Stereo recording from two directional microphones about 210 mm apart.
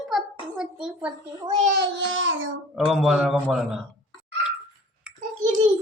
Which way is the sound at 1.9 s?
65° right (ahead or behind).